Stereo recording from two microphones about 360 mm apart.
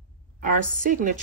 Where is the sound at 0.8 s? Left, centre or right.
Right.